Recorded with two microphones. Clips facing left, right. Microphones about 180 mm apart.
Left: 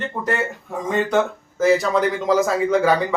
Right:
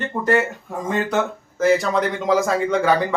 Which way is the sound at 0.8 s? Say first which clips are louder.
Left 2 dB; centre (ahead or behind).